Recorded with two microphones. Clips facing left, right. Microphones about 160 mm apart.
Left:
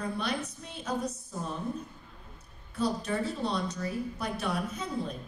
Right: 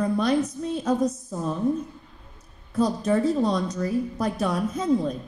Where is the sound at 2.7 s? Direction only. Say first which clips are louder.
Right 8 dB; 45° right (ahead or behind).